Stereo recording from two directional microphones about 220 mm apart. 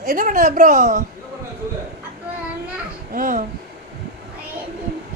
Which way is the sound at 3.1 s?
35° right (ahead or behind).